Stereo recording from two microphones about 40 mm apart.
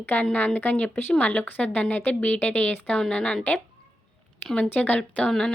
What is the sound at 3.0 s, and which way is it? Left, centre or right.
Speech, left.